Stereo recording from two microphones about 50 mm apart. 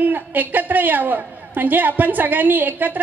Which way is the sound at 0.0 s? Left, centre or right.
Right.